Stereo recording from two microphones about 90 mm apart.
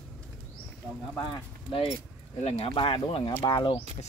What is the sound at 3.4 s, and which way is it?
Speech, 65° left (ahead or behind).